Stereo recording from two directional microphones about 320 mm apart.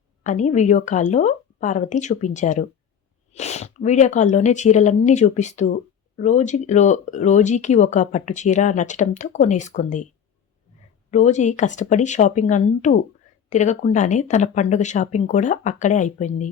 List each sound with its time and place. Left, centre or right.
0.2 s speech: left
11.1 s speech: left